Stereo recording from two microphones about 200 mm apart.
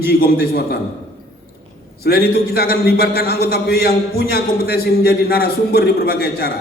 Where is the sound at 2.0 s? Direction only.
50° left (ahead or behind).